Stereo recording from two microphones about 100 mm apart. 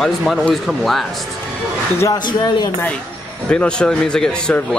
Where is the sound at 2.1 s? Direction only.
45° left (ahead or behind).